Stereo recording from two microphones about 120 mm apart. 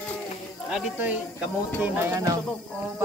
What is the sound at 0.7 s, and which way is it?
Sizzle, 10° right (ahead or behind).